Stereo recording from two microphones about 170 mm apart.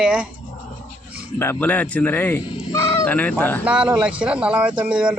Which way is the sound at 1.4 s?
10° left (ahead or behind).